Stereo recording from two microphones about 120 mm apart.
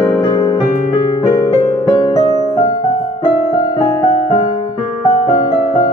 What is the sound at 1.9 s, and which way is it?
Music, 50° left (ahead or behind).